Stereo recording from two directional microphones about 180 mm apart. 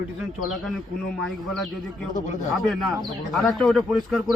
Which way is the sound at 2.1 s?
45° left (ahead or behind).